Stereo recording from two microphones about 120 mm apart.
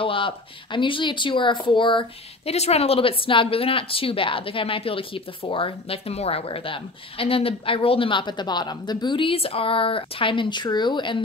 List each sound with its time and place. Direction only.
0.0 s speech: 45° left (ahead or behind)
2.5 s speech: 60° left (ahead or behind); by 11.1 s 40° left (ahead or behind)